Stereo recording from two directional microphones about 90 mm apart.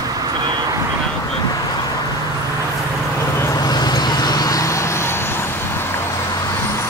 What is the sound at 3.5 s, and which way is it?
Vehicle, 45° left (ahead or behind).